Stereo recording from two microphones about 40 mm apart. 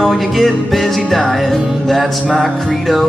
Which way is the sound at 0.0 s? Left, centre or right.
Centre.